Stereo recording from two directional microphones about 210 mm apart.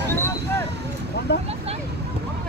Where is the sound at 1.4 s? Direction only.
30° right (ahead or behind).